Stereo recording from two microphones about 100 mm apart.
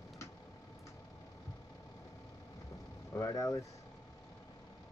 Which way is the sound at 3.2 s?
35° left (ahead or behind).